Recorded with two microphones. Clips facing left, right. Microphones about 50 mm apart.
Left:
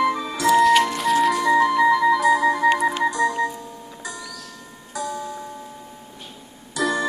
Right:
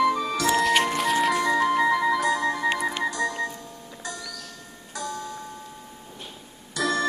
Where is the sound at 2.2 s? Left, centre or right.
Centre.